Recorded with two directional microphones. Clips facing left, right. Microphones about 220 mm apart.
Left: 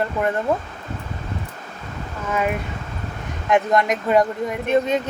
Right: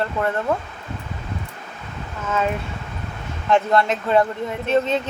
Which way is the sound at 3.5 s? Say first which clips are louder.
Even; 15° left (ahead or behind).